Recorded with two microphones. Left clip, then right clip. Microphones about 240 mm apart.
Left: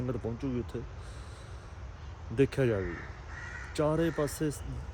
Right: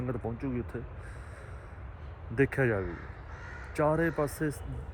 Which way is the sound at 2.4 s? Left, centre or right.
Centre.